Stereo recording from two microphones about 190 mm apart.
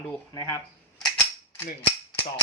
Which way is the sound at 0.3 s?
15° left (ahead or behind).